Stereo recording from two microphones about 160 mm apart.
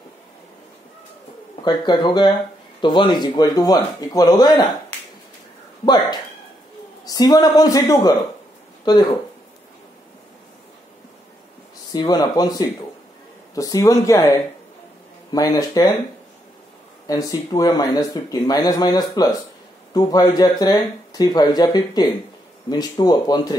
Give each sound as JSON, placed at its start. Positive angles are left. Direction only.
{"t": 1.6, "sound": "speech", "side_deg": 25}
{"t": 7.1, "sound": "speech", "side_deg": 25}
{"t": 11.9, "sound": "speech", "side_deg": 25}
{"t": 17.1, "sound": "speech", "side_deg": 25}